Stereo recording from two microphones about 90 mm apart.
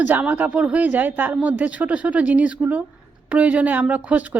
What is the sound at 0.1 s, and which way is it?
A woman's voice, 20° right (ahead or behind).